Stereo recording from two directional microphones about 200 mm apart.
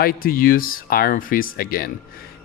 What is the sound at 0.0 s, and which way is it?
Speech, 45° left (ahead or behind).